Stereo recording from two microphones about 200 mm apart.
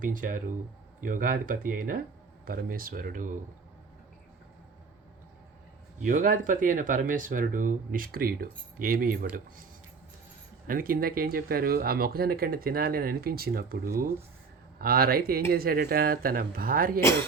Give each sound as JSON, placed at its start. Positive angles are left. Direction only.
{"t": 0.0, "sound": "speech", "side_deg": -45}
{"t": 6.0, "sound": "speech", "side_deg": -40}
{"t": 10.7, "sound": "speech", "side_deg": -45}